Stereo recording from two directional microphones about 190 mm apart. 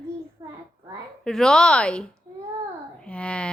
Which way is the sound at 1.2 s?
5° left (ahead or behind).